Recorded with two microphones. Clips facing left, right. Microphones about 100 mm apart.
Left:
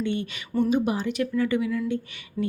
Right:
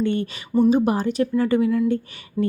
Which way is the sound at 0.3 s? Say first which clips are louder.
Right 7 dB; 30° right (ahead or behind).